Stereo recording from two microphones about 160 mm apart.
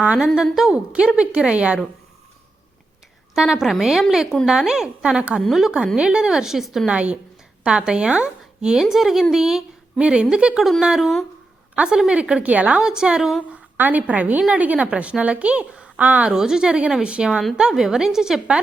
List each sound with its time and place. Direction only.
0.0 s a woman's voice: 10° right (ahead or behind)
3.3 s a woman's voice: 5° right (ahead or behind)